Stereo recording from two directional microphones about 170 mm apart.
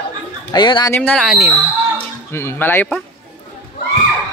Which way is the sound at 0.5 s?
25° left (ahead or behind).